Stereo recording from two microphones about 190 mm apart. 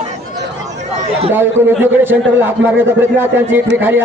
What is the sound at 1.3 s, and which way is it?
Speech, 10° right (ahead or behind).